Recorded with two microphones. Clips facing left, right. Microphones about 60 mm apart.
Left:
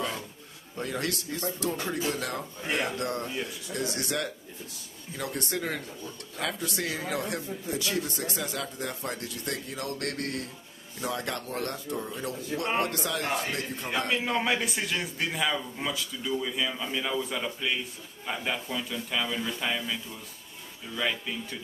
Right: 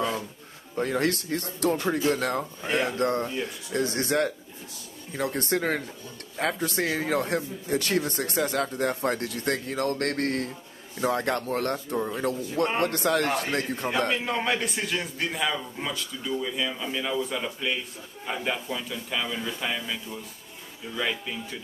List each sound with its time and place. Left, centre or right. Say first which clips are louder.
0.7 s a man's voice: right 6 dB; right
13.8 s a man's voice: right 1 dB; centre